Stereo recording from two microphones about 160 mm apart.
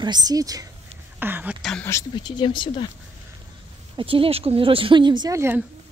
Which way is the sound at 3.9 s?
35° right (ahead or behind).